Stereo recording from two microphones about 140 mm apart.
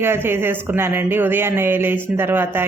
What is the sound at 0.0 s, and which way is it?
A woman's voice, 15° right (ahead or behind).